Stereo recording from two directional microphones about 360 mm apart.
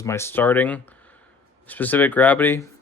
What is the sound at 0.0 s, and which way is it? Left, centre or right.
Speech, centre.